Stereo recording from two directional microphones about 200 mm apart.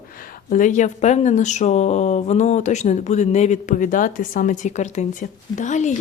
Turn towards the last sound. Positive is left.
turn(degrees=35)  # may be behind; listen again after turning